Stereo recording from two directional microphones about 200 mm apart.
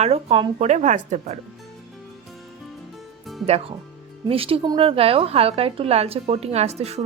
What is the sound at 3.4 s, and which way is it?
A woman's voice, 30° right (ahead or behind).